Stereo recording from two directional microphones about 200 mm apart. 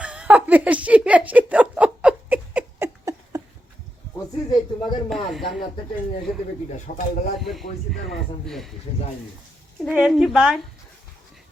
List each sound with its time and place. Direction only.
0.0 s a sound: 5° right (ahead or behind)
4.1 s a sound: 20° left (ahead or behind)
5.0 s speech: centre (ahead or behind)
6.7 s speech: 45° left (ahead or behind)
7.4 s speech: centre (ahead or behind)
9.9 s speech: 5° left (ahead or behind)